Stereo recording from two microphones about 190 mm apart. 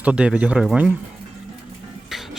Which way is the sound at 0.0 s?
5° right (ahead or behind).